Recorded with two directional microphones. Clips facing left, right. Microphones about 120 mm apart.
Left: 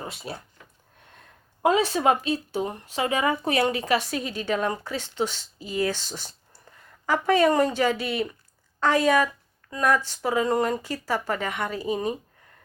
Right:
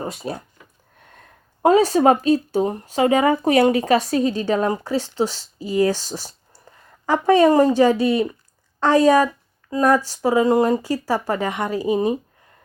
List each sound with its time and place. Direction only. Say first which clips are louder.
0.0 s speech: right 8 dB; 40° right (ahead or behind)
1.6 s speech: right 7 dB; 40° right (ahead or behind)